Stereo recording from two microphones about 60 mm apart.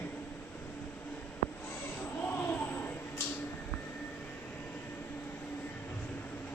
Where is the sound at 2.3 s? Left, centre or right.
Left.